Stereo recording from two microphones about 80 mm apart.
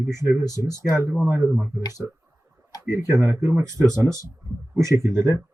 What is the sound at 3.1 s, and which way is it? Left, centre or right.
Speech, right.